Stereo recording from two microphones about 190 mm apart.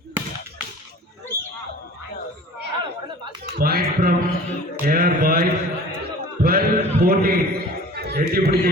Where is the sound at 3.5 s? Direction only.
50° right (ahead or behind).